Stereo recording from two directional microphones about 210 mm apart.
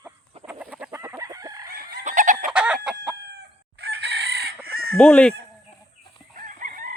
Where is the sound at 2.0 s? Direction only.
35° right (ahead or behind).